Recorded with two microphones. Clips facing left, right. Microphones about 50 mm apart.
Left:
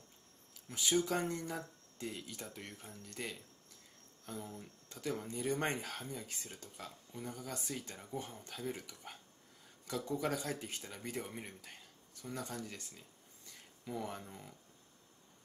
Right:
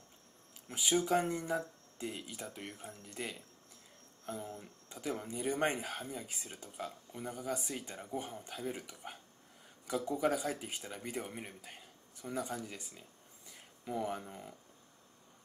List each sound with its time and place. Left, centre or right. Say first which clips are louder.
0.7 s speech: right 2 dB; centre